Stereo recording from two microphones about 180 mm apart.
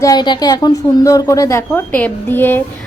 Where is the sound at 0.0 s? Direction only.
20° left (ahead or behind).